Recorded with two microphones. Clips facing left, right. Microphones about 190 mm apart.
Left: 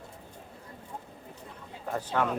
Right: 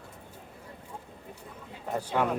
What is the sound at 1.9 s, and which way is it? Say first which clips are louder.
Speech: right 1 dB; 10° right (ahead or behind).